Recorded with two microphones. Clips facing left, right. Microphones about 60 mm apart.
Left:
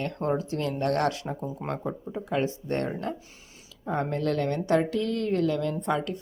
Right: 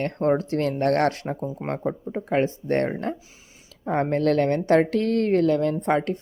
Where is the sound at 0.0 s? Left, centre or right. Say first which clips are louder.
Right 6 dB; right.